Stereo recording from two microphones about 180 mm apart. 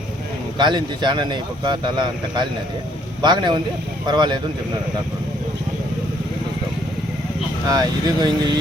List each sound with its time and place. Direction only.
0.6 s speech: 25° right (ahead or behind)
7.7 s speech: 20° right (ahead or behind)